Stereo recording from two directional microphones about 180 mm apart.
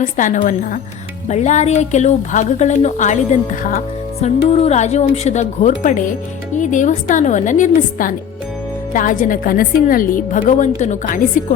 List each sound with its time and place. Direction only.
0.0 s a woman's voice: 45° left (ahead or behind)